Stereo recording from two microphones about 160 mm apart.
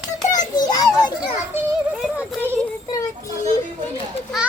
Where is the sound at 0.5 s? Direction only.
25° left (ahead or behind).